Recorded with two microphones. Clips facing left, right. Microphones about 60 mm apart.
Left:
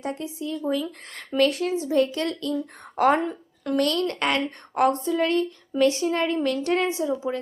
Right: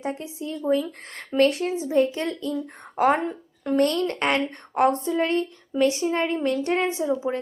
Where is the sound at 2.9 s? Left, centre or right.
Centre.